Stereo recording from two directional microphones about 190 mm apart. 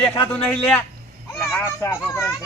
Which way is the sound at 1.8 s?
15° left (ahead or behind).